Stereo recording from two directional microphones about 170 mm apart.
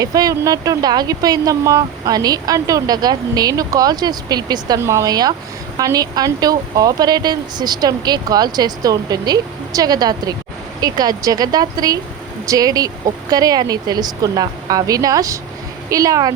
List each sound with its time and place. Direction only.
0.0 s speech: 20° right (ahead or behind)